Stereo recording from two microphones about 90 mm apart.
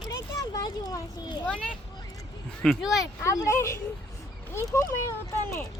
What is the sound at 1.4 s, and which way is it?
Speech, 5° left (ahead or behind).